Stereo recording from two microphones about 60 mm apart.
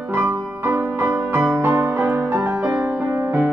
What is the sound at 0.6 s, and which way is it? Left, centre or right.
Music, right.